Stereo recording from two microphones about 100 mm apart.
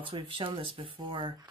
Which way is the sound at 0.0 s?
60° right (ahead or behind).